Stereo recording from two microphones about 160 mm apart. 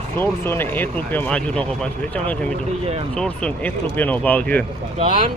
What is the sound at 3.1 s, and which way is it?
Speech, 5° left (ahead or behind).